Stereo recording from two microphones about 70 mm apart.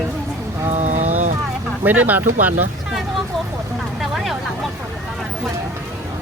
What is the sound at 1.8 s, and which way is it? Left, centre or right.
Speech, right.